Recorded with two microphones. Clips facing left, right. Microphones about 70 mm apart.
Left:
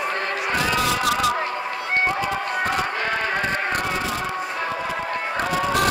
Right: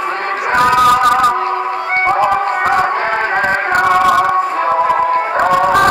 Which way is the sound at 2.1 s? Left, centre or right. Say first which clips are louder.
Right 11 dB; right.